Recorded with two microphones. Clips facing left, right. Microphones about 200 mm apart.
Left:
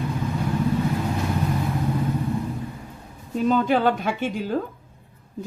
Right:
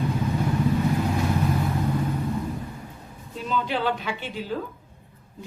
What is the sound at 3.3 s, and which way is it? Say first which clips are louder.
A woman's voice: left 7 dB; 45° left (ahead or behind).